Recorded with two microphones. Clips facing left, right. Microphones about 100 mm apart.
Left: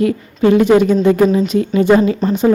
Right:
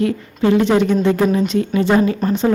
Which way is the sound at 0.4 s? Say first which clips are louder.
Left 4 dB; 15° left (ahead or behind).